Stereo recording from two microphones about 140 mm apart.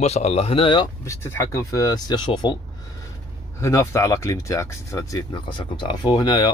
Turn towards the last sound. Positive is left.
turn(degrees=25)  # may be behind; listen again after turning